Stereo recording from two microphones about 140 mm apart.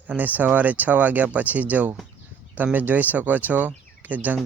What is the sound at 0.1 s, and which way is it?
Speech, 10° right (ahead or behind).